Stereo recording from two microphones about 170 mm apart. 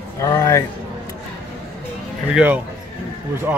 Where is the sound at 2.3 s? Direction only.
10° right (ahead or behind).